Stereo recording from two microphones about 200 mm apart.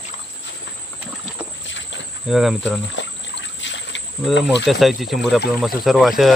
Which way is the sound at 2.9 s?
65° left (ahead or behind).